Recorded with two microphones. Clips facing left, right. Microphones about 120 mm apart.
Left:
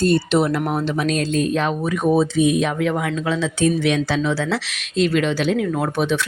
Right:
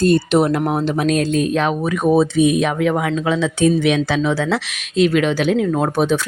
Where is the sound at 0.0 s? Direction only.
50° right (ahead or behind).